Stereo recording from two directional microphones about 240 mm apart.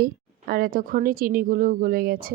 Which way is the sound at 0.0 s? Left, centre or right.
Right.